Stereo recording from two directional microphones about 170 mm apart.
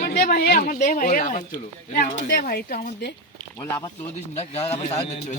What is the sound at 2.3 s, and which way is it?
Speech, 60° left (ahead or behind).